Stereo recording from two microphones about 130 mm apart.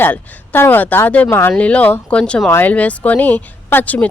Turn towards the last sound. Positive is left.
turn(degrees=10)  # may be behind; listen again after turning